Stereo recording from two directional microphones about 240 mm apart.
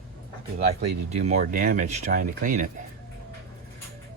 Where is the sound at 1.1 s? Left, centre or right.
Right.